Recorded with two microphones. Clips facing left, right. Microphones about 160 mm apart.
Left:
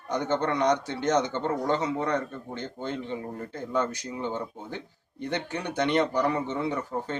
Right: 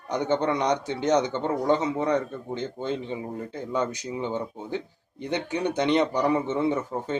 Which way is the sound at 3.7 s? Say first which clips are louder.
Right 1 dB; 15° right (ahead or behind).